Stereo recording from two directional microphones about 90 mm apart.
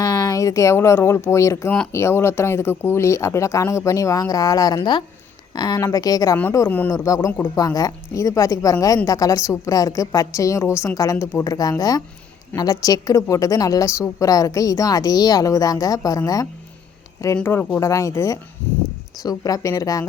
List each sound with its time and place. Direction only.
0.0 s a woman's voice: 40° left (ahead or behind)
6.3 s a woman's voice: 30° left (ahead or behind)
6.9 s a woman's voice: 40° left (ahead or behind)
17.4 s speech: 25° left (ahead or behind)
17.7 s a woman's voice: 35° left (ahead or behind)